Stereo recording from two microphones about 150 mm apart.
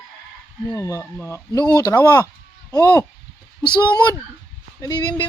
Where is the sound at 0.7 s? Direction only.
20° left (ahead or behind).